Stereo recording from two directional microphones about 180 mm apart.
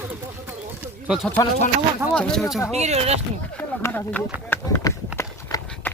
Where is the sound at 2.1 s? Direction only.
5° left (ahead or behind).